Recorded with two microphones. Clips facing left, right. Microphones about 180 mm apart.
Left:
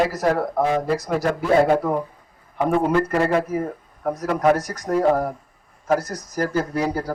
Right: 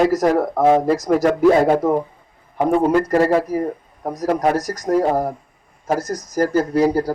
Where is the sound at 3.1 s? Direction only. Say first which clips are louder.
Right 4 dB; 35° right (ahead or behind).